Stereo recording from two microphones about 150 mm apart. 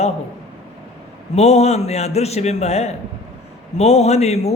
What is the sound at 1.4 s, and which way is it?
A man's voice, 45° left (ahead or behind).